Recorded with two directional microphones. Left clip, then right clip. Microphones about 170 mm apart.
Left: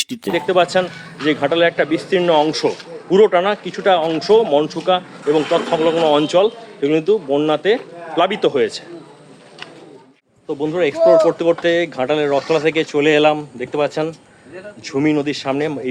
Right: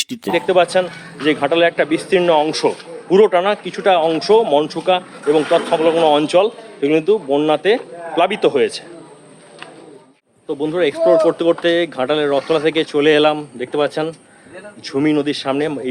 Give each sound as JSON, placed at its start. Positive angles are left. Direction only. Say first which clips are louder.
{"t": 0.3, "sound": "a man's voice", "louder": "right 1 dB", "side_deg": -15}
{"t": 10.5, "sound": "speech", "louder": "right 1 dB", "side_deg": 0}